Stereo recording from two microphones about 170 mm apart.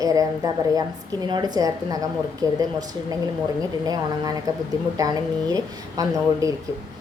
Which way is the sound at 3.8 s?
20° right (ahead or behind).